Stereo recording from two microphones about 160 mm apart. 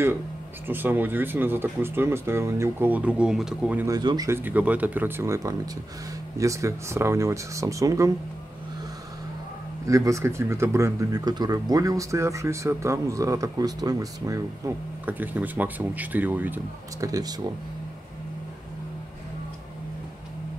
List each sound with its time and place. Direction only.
0.7 s speech: 10° right (ahead or behind)
3.8 s speech: 25° right (ahead or behind)
4.3 s speech: 10° right (ahead or behind)
9.8 s speech: 20° right (ahead or behind)
17.1 s speech: 25° right (ahead or behind)